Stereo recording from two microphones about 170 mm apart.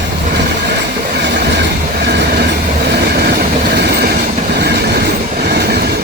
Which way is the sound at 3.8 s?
70° right (ahead or behind).